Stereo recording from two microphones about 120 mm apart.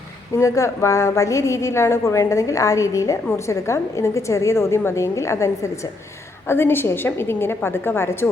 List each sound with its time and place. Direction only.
0.3 s a woman's voice: 25° left (ahead or behind)
6.5 s a woman's voice: 20° left (ahead or behind)